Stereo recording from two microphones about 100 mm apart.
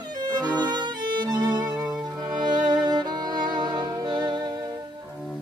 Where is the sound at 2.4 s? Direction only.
45° right (ahead or behind).